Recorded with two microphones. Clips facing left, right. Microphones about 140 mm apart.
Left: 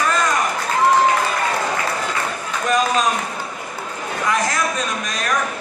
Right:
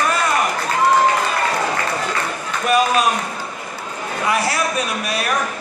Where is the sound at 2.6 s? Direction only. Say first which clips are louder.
Right 2 dB; 10° right (ahead or behind).